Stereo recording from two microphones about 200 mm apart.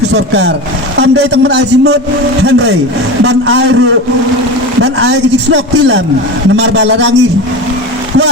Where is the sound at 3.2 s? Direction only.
65° right (ahead or behind).